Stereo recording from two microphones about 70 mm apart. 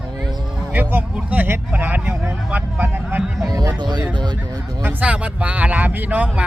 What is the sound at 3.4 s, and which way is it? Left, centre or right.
Speech, right.